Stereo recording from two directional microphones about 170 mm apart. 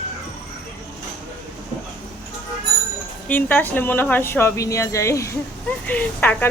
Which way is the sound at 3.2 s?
10° left (ahead or behind).